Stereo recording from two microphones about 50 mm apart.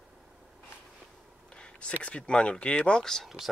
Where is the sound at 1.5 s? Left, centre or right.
Left.